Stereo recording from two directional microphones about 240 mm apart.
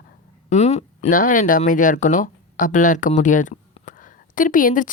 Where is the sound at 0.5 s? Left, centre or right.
Left.